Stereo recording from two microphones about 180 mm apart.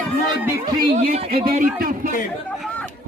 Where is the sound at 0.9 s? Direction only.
50° right (ahead or behind).